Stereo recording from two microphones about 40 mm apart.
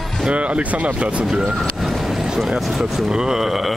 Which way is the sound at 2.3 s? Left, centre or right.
Centre.